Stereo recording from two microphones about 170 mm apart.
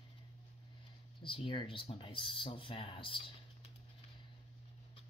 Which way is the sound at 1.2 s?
30° left (ahead or behind).